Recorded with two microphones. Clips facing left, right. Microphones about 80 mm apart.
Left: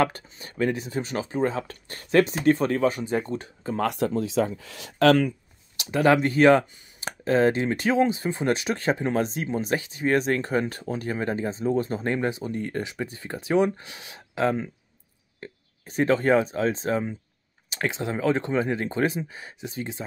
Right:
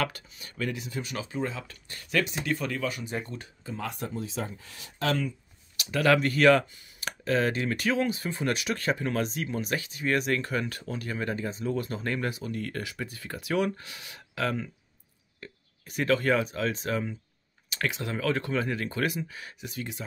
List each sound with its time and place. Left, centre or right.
0.0 s speech: left
3.7 s speech: left
5.8 s speech: left